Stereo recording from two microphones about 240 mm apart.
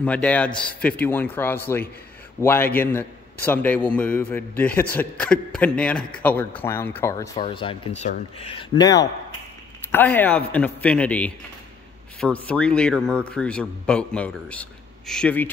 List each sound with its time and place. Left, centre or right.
0.0 s a man's voice: centre